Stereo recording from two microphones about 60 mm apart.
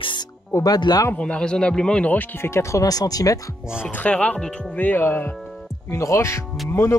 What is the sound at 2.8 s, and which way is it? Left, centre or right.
Speech, left.